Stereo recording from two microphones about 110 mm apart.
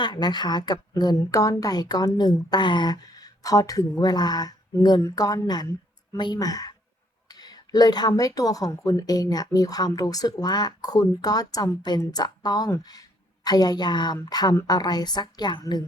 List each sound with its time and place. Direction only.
0.0 s a woman's voice: 40° left (ahead or behind)